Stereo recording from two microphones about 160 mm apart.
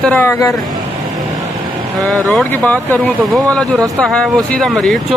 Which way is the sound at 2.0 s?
5° left (ahead or behind).